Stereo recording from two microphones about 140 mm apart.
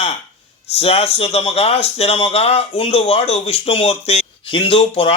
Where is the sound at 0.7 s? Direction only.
45° left (ahead or behind).